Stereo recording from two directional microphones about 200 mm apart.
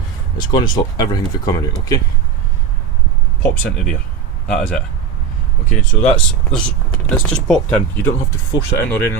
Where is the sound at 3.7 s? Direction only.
5° left (ahead or behind).